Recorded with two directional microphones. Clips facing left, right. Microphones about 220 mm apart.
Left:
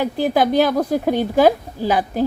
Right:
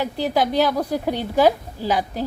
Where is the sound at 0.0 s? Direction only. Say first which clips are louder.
Left 4 dB; 50° left (ahead or behind).